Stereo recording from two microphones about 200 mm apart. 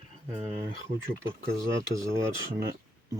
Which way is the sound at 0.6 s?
15° right (ahead or behind).